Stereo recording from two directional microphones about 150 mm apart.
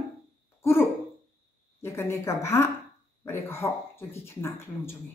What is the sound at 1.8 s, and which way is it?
Speech, 15° left (ahead or behind).